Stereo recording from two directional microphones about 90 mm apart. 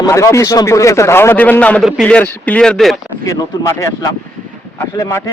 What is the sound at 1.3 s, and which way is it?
Speech, 15° left (ahead or behind).